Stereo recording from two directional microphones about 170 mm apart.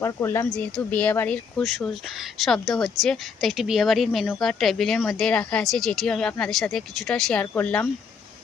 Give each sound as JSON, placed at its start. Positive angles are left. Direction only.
{"t": 0.0, "sound": "speech", "side_deg": 15}